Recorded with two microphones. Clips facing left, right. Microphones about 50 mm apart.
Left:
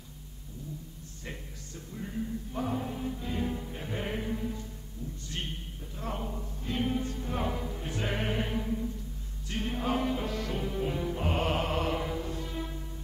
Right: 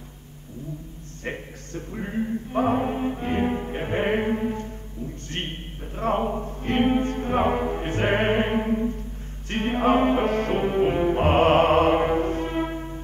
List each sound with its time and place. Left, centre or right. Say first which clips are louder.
1.2 s music: right 11 dB; right
5.3 s a sound: right 5 dB; right
9.5 s music: right 10 dB; right